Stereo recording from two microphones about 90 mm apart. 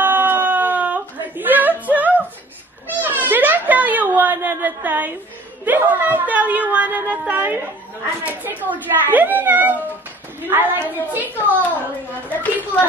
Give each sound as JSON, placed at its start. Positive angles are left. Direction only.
{"t": 0.0, "sound": "a sound", "side_deg": -20}
{"t": 5.7, "sound": "speech", "side_deg": -20}
{"t": 12.3, "sound": "a woman's voice", "side_deg": 20}